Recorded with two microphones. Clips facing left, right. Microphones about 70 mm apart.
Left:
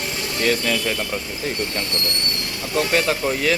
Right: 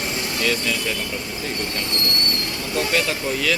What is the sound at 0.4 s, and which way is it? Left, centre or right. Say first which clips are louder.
Speech: left 3 dB; left.